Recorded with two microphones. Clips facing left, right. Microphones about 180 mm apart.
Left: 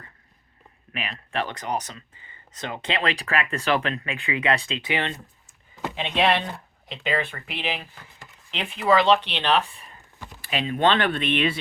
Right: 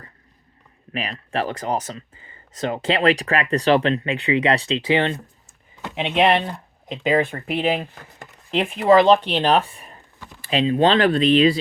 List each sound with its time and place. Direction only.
0.9 s speech: 40° right (ahead or behind); by 6.3 s 20° right (ahead or behind)
6.9 s speech: 45° right (ahead or behind)